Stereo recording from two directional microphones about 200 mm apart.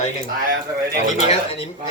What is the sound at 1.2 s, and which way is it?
Speech, 30° left (ahead or behind).